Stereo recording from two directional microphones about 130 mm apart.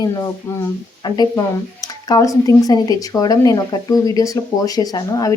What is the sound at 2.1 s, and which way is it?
A woman's voice, 25° left (ahead or behind).